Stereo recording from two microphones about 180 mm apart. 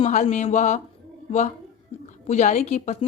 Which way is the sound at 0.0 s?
40° left (ahead or behind).